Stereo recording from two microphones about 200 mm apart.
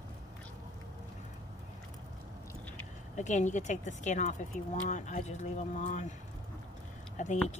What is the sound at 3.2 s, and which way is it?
Speech, 35° left (ahead or behind).